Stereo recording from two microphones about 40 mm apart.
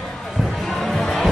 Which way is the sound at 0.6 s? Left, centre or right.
Centre.